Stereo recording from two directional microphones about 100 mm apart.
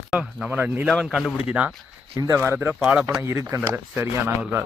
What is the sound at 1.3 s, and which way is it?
Speech, 10° right (ahead or behind).